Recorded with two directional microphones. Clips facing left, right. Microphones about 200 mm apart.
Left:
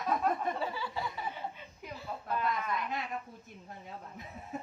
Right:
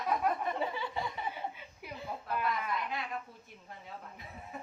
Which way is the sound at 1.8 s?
10° right (ahead or behind).